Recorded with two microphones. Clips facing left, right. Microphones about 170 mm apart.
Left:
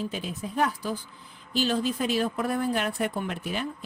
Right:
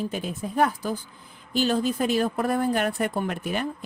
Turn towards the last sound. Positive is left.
turn(degrees=-55)  # may be behind; listen again after turning